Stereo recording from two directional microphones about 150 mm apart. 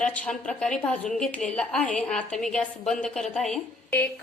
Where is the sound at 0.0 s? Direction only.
10° left (ahead or behind).